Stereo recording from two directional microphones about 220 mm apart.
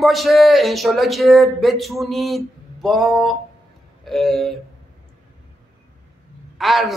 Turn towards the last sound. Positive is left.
turn(degrees=0)  # may be behind; listen again after turning